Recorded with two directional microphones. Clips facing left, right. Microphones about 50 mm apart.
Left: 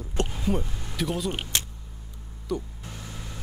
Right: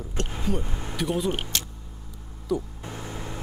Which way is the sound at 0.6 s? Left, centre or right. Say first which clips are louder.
Right 1 dB; right.